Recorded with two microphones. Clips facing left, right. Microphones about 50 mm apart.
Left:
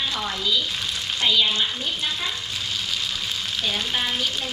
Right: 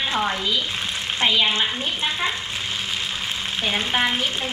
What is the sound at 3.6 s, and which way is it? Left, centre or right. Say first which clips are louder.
Speech: right 5 dB; right.